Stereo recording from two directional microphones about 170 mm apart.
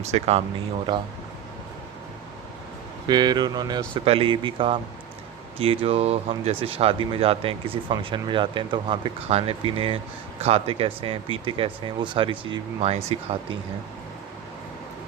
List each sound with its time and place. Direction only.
0.1 s speech: 35° right (ahead or behind)
0.9 s speech: 25° right (ahead or behind)
3.1 s speech: 25° right (ahead or behind)